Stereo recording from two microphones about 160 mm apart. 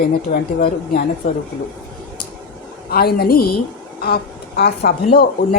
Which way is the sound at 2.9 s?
75° left (ahead or behind).